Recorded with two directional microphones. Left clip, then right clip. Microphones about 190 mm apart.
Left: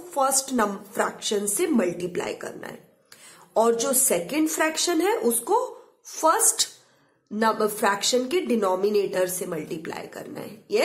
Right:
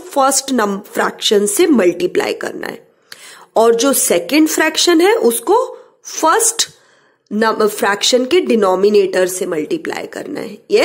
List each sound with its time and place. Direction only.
0.1 s a woman's voice: 40° right (ahead or behind)